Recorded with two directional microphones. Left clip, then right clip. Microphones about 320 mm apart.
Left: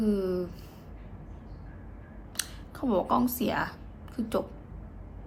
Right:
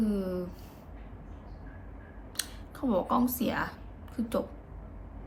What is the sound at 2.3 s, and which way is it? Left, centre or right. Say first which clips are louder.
A woman's voice: left 1 dB; centre.